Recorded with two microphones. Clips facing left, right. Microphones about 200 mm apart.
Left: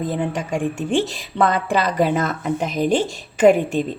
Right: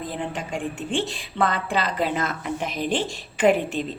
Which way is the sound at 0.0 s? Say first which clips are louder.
Left 7 dB; 45° left (ahead or behind).